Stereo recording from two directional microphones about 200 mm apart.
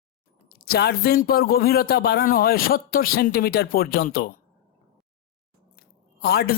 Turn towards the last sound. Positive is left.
turn(degrees=50)  # may be behind; listen again after turning